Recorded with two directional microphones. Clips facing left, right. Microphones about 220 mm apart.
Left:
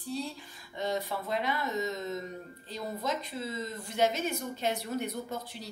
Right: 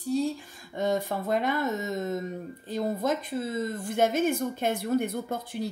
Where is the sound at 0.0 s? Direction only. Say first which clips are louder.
Right 9 dB; 45° right (ahead or behind).